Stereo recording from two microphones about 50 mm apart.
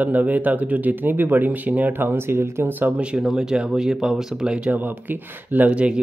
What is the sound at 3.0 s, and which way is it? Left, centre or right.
Speech, right.